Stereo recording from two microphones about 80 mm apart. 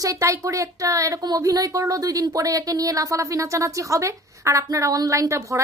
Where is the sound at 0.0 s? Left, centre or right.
Right.